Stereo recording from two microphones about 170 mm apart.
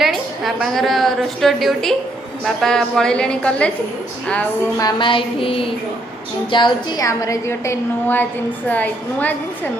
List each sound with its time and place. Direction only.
0.0 s a woman's voice: centre (ahead or behind)
4.8 s music: 25° left (ahead or behind)
6.5 s a woman's voice: 25° left (ahead or behind); by 9.3 s 10° left (ahead or behind)